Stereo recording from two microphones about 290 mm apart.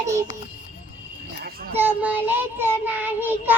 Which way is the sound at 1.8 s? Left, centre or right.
Centre.